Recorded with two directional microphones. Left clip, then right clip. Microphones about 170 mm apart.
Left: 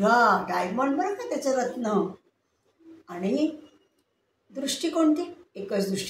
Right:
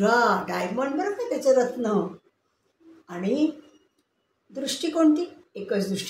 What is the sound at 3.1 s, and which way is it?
Speech, 30° right (ahead or behind).